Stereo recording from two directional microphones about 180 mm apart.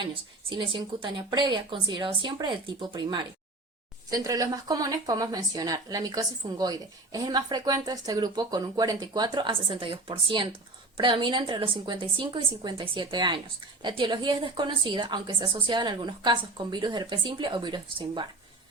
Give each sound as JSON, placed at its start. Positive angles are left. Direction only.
{"t": 0.0, "sound": "speech", "side_deg": -25}